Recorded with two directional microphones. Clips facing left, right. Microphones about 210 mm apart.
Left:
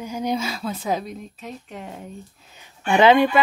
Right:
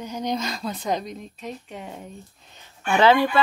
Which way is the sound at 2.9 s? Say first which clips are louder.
Left 3 dB; 20° left (ahead or behind).